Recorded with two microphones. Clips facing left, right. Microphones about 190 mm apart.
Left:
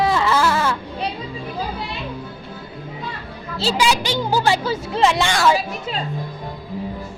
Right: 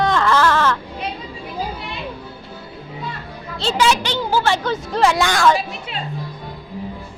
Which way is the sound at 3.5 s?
5° left (ahead or behind).